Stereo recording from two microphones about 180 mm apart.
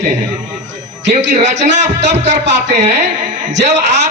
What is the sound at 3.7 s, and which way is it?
Speech, 40° right (ahead or behind).